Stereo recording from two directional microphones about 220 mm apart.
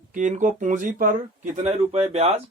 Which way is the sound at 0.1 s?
35° right (ahead or behind).